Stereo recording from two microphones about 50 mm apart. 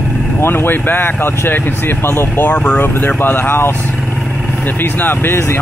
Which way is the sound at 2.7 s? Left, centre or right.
Left.